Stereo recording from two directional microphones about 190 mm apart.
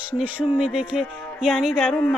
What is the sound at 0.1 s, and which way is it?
Music, 5° right (ahead or behind).